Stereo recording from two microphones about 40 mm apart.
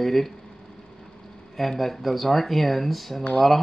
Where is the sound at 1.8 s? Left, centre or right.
Centre.